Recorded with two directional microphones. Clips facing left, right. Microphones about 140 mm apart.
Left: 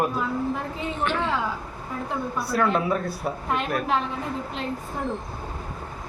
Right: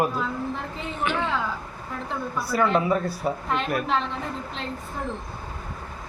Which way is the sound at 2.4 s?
Centre (ahead or behind).